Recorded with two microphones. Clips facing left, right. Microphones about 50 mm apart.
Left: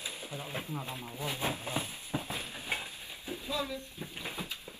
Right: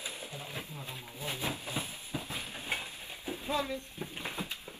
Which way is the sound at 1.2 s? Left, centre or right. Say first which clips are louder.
Left 2 dB; left.